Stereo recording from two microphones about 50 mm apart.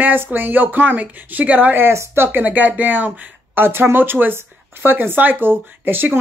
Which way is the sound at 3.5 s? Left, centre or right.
Right.